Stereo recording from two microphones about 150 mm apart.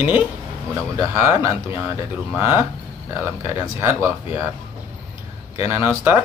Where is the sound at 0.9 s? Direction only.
20° right (ahead or behind).